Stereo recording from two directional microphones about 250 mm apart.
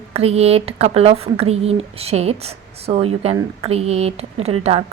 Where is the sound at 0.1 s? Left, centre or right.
Right.